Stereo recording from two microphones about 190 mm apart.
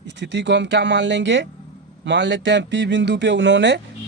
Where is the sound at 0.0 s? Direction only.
70° right (ahead or behind).